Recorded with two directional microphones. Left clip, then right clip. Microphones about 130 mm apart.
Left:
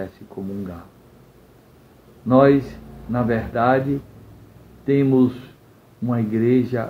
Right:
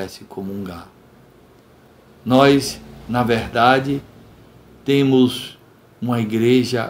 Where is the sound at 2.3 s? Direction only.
30° right (ahead or behind).